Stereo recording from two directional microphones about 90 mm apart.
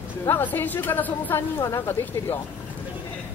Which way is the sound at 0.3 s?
25° left (ahead or behind).